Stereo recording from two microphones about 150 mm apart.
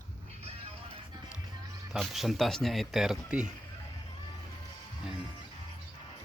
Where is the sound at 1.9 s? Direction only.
Centre (ahead or behind).